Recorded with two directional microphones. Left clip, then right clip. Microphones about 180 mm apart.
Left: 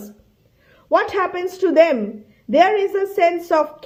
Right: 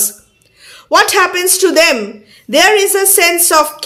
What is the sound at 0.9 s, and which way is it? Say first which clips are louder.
A woman's voice: right 8 dB; 10° right (ahead or behind).